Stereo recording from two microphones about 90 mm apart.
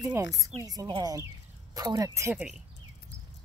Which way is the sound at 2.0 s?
35° right (ahead or behind).